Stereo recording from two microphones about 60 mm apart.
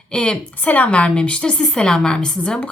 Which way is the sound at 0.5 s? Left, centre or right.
Left.